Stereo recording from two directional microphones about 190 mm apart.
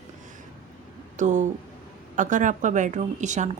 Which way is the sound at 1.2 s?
40° right (ahead or behind).